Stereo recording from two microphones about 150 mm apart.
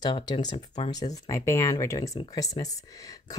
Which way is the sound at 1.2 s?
20° left (ahead or behind).